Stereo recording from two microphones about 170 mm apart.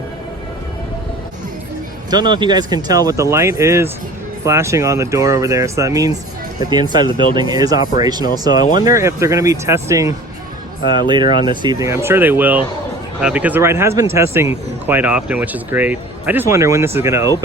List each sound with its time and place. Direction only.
2.0 s speech: 25° right (ahead or behind)